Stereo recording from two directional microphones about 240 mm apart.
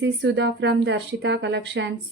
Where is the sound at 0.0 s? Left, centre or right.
Right.